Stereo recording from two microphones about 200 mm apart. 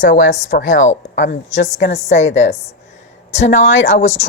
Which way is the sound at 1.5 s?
35° left (ahead or behind).